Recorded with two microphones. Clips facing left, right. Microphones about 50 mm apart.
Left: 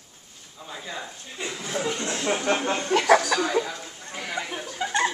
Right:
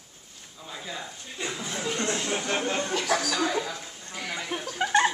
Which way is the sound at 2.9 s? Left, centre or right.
Left.